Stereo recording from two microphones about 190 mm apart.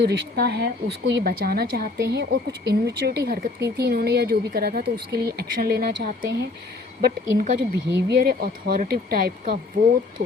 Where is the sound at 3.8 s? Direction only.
55° right (ahead or behind).